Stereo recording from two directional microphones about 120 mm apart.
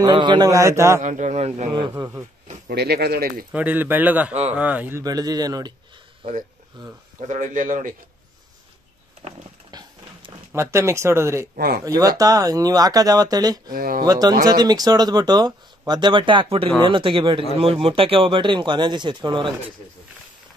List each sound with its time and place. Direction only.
0.0 s speech: 40° right (ahead or behind)
0.5 s speech: 25° right (ahead or behind)
1.0 s speech: 85° right
1.9 s speech: 25° right (ahead or behind)
3.5 s speech: 15° right (ahead or behind)
4.3 s speech: 65° right (ahead or behind)
4.6 s speech: 15° right (ahead or behind)
5.0 s speech: 30° right (ahead or behind)
6.8 s speech: 40° right (ahead or behind)
7.2 s speech: 80° right
9.7 s a sound: 35° right (ahead or behind)
10.5 s speech: 20° right (ahead or behind); by 19.5 s 40° right (ahead or behind)